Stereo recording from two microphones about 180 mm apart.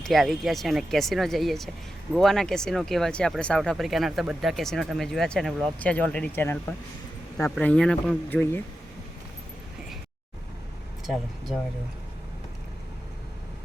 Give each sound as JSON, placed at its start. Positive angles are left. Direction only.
{"t": 0.0, "sound": "speech", "side_deg": 0}